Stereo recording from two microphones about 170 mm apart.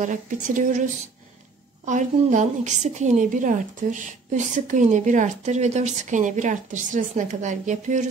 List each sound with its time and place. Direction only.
0.0 s a woman's voice: 50° right (ahead or behind)
1.9 s a woman's voice: 45° right (ahead or behind)